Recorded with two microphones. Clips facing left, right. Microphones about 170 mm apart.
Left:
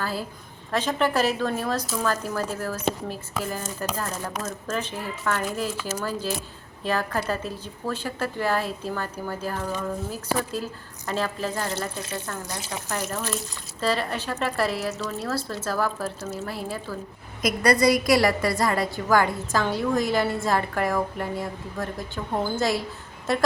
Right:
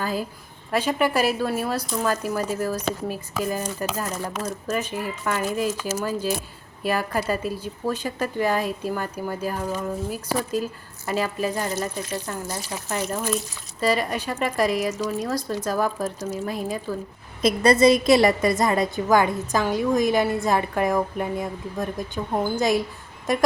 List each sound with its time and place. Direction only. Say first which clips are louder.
0.0 s a woman's voice: right 3 dB; 15° right (ahead or behind)